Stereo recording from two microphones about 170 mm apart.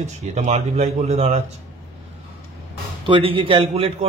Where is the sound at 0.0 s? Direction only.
45° right (ahead or behind).